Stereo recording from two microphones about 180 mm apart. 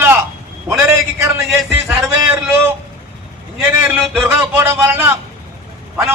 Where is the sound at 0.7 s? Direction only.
15° right (ahead or behind).